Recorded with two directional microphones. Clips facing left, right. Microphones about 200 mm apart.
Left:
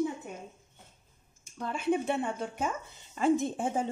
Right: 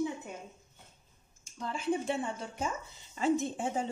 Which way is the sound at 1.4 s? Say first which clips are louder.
Left 3 dB; 60° left (ahead or behind).